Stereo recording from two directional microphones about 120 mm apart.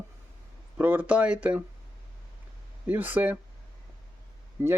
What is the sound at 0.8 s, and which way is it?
Speech, 15° right (ahead or behind).